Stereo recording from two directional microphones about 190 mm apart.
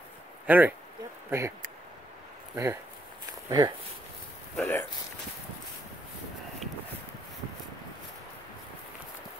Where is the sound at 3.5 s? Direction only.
20° right (ahead or behind).